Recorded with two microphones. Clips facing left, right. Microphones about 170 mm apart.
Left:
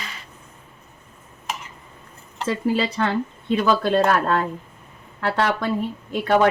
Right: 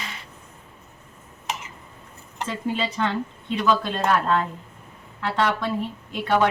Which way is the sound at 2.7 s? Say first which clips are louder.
Left 3 dB; 75° left (ahead or behind).